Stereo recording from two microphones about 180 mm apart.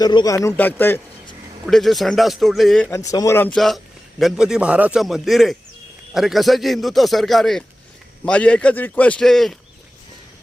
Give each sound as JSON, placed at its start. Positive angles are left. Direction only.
{"t": 0.0, "sound": "a man's voice", "side_deg": 20}
{"t": 1.6, "sound": "speech", "side_deg": 0}
{"t": 2.9, "sound": "a man's voice", "side_deg": 20}